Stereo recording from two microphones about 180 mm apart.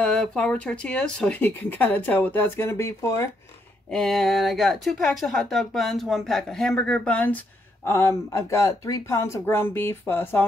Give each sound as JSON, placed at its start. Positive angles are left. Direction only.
{"t": 0.0, "sound": "speech", "side_deg": 5}
{"t": 3.9, "sound": "speech", "side_deg": 0}